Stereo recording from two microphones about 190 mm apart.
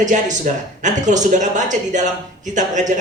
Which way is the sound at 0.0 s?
40° right (ahead or behind).